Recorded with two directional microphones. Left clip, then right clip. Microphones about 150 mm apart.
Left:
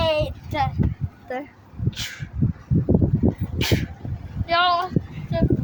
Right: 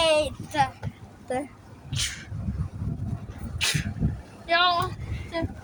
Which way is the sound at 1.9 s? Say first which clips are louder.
Even; 10° left (ahead or behind).